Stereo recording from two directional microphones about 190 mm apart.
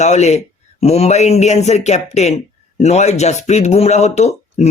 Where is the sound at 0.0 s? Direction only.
35° left (ahead or behind).